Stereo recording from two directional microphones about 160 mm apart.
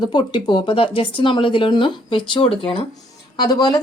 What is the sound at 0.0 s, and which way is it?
Speech, 30° left (ahead or behind).